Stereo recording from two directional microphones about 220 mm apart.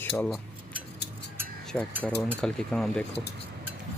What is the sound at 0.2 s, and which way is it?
Cutlery, 5° left (ahead or behind).